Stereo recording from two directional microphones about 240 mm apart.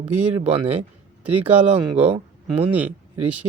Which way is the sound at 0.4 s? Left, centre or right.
Right.